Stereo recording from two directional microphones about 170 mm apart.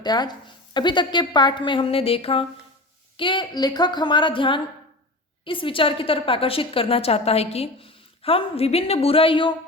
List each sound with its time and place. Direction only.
0.0 s a woman's voice: 25° left (ahead or behind)